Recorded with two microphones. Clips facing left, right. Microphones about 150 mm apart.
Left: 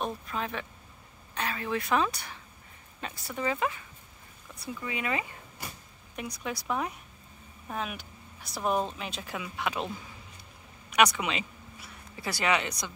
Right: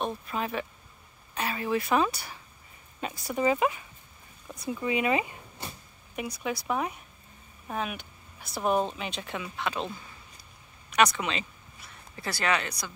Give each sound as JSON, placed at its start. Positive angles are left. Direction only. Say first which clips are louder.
{"t": 0.0, "sound": "speech", "louder": "right 2 dB", "side_deg": -5}
{"t": 6.1, "sound": "speech", "louder": "right 3 dB", "side_deg": -5}
{"t": 10.9, "sound": "speech", "louder": "even", "side_deg": 10}